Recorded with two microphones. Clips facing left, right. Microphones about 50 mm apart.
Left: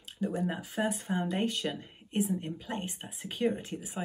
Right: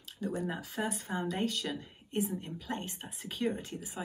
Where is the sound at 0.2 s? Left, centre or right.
Left.